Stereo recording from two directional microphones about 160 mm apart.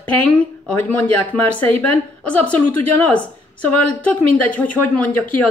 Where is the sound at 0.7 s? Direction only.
10° left (ahead or behind).